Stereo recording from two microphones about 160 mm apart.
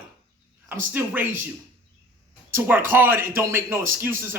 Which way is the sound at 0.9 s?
10° right (ahead or behind).